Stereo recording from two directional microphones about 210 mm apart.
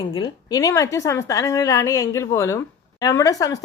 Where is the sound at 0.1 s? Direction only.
20° left (ahead or behind).